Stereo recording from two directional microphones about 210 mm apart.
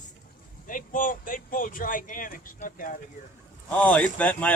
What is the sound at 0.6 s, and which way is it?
Speech, 40° left (ahead or behind).